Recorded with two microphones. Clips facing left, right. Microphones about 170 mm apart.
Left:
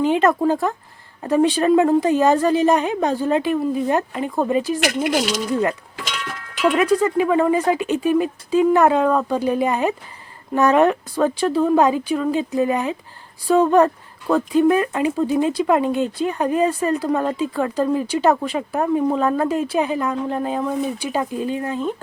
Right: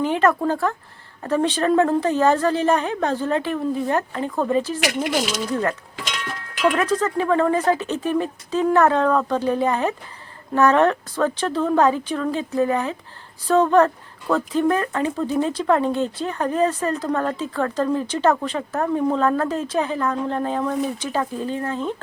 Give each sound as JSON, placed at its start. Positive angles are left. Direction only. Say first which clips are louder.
{"t": 0.0, "sound": "speech", "louder": "left 2 dB", "side_deg": 20}
{"t": 6.7, "sound": "speech", "louder": "left 3 dB", "side_deg": 15}